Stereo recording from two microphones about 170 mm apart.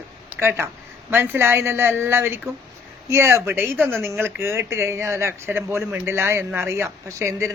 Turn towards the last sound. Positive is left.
turn(degrees=-15)  # may be behind; listen again after turning